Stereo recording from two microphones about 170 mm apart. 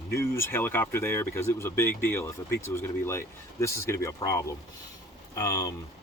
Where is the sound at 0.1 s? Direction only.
15° left (ahead or behind).